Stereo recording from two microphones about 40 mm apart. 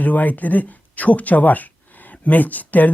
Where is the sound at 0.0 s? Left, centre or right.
Left.